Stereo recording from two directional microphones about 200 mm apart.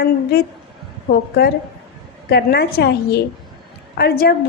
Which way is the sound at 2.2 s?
55° left (ahead or behind).